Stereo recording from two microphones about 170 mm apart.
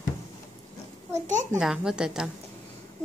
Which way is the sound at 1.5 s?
5° right (ahead or behind).